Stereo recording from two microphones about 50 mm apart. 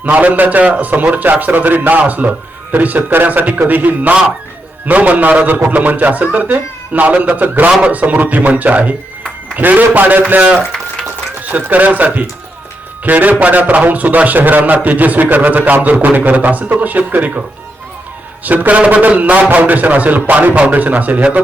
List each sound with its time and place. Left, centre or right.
0.0 s a man's voice: right
18.4 s a man's voice: right